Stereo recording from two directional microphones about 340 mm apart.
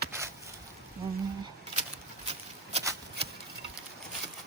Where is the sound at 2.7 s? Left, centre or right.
Centre.